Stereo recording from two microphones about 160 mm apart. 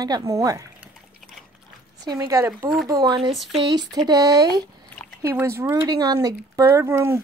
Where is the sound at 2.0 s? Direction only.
20° right (ahead or behind).